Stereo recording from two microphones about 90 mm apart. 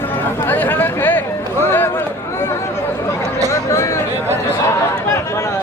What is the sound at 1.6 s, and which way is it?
Run, 25° left (ahead or behind).